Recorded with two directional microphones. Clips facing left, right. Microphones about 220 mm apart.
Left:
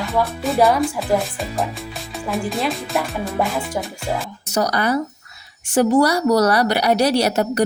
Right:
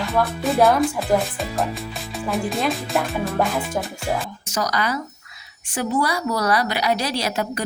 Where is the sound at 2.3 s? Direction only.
Centre (ahead or behind).